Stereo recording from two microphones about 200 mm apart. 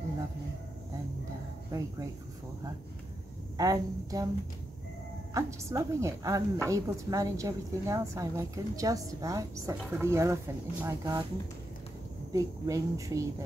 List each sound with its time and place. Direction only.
1.7 s a woman's voice: 15° right (ahead or behind)
3.5 s a woman's voice: 15° right (ahead or behind)
5.3 s a woman's voice: 15° right (ahead or behind)
12.3 s a woman's voice: 15° right (ahead or behind)